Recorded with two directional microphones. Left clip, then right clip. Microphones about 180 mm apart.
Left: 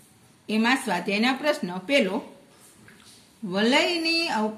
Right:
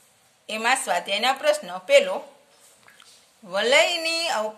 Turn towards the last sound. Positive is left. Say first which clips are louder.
# even
turn(degrees=-45)  # may be behind; listen again after turning